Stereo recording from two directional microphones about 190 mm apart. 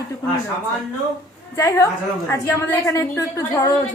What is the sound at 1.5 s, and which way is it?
A woman's voice, 15° left (ahead or behind).